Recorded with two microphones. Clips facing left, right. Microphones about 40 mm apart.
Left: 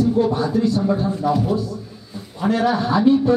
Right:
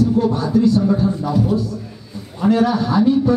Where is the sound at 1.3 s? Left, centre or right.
Centre.